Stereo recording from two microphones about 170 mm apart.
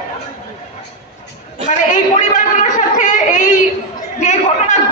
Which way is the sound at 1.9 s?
45° left (ahead or behind).